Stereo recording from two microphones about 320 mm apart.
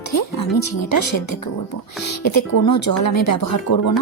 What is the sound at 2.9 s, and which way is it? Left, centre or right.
Speech, left.